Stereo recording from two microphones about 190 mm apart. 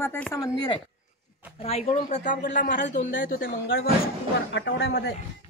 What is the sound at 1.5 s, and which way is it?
Speech, 30° left (ahead or behind).